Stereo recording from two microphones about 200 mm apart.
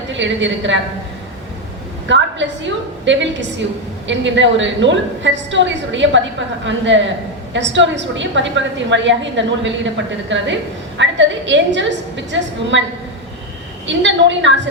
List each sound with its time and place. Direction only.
0.1 s a woman's voice: 65° right (ahead or behind)
2.0 s a woman's voice: 65° right (ahead or behind)
13.8 s a woman's voice: 65° right (ahead or behind)